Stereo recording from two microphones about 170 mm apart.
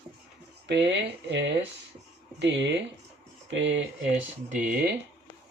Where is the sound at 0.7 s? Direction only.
90° right.